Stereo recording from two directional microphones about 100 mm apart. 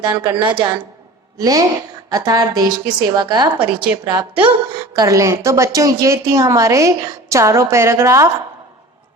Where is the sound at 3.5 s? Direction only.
60° right (ahead or behind).